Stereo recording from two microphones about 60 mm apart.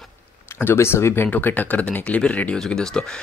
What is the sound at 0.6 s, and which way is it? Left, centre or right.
Speech, left.